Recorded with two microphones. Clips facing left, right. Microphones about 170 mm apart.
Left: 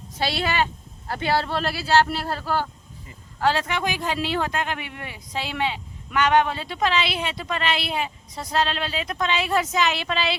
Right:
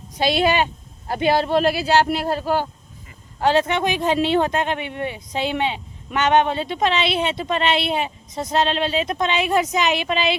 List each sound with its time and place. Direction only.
0.2 s speech: 20° right (ahead or behind)